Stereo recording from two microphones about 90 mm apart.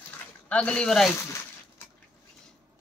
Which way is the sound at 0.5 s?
15° left (ahead or behind).